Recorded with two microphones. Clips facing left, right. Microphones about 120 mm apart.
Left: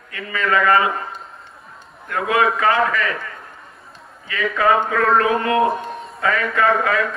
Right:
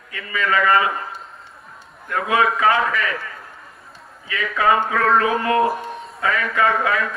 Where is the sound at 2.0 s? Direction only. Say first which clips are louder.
Left 1 dB; centre (ahead or behind).